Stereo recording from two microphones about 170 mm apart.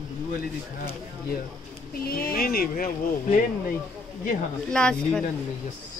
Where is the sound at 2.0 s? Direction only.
65° left (ahead or behind).